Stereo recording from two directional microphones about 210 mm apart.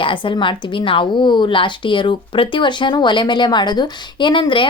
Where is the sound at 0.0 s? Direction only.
25° left (ahead or behind).